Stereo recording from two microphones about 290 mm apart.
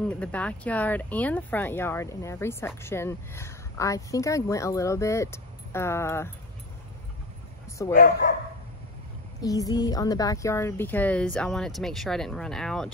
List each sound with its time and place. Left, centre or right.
0.0 s speech: centre
7.9 s speech: left
9.4 s speech: centre